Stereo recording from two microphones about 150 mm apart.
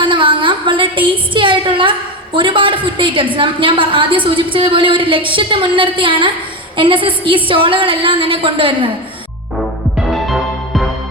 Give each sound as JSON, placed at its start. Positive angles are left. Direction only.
{"t": 0.0, "sound": "a woman's voice", "side_deg": -35}
{"t": 10.1, "sound": "music", "side_deg": 0}